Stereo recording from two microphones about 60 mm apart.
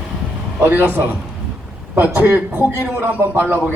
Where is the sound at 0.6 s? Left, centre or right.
Right.